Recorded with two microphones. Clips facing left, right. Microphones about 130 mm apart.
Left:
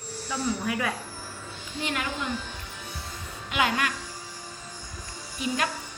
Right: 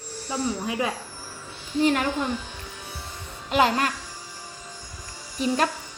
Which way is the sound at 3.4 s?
40° right (ahead or behind).